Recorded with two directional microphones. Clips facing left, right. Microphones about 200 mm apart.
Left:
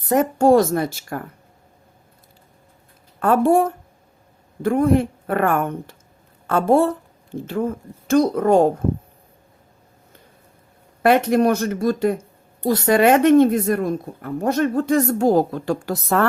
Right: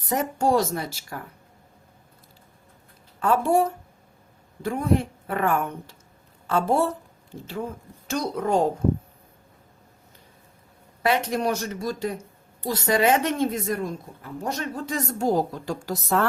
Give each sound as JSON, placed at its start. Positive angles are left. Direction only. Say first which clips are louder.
{"t": 0.1, "sound": "speech", "louder": "left 8 dB", "side_deg": 55}
{"t": 3.2, "sound": "speech", "louder": "left 5 dB", "side_deg": 55}
{"t": 11.0, "sound": "speech", "louder": "left 8 dB", "side_deg": 55}